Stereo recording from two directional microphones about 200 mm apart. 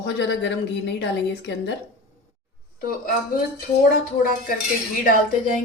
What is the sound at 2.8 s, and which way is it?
Speech, 45° left (ahead or behind).